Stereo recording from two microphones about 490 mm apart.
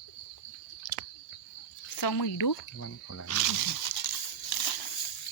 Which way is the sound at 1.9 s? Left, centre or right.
Left.